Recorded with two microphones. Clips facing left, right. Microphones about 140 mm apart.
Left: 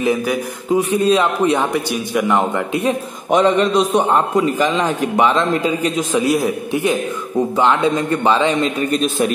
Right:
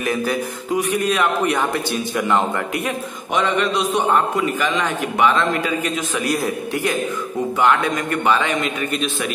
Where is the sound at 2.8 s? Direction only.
35° left (ahead or behind).